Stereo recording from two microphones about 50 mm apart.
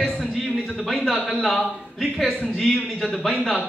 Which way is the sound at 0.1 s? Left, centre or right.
Centre.